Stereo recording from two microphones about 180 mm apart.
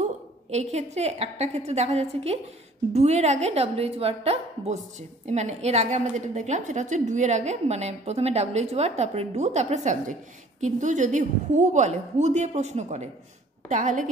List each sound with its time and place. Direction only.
0.0 s a woman's voice: 40° right (ahead or behind)